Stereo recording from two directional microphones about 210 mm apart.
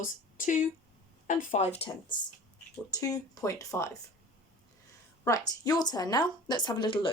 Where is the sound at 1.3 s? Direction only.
35° left (ahead or behind).